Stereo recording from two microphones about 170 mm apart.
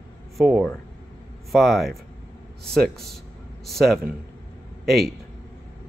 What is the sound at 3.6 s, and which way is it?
Speech, centre (ahead or behind).